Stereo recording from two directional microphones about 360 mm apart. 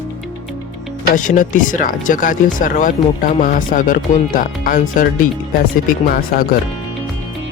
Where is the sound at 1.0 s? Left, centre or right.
Left.